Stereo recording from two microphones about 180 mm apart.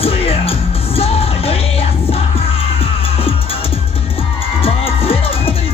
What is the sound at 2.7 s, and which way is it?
Music, 30° left (ahead or behind).